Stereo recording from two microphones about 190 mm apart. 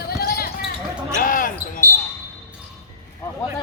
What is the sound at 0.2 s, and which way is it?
Basketball bounce, 50° left (ahead or behind).